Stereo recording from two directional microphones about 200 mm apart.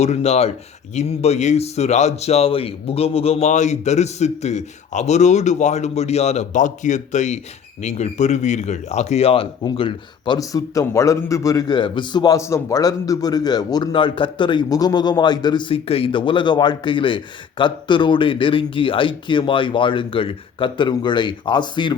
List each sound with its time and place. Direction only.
0.0 s a man's voice: 35° left (ahead or behind)